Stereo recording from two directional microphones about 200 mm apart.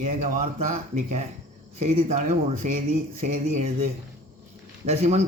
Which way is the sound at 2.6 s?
40° right (ahead or behind).